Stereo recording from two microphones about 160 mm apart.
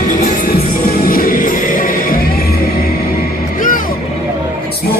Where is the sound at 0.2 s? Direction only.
60° left (ahead or behind).